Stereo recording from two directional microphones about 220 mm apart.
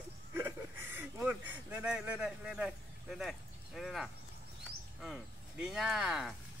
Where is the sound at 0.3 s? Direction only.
10° right (ahead or behind).